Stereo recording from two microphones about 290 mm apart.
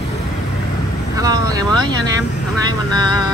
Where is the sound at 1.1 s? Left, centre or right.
Centre.